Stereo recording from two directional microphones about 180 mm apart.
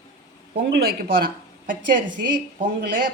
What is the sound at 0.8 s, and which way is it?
Speech, 55° right (ahead or behind).